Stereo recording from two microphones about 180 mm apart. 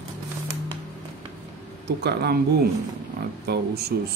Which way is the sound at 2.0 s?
65° right (ahead or behind).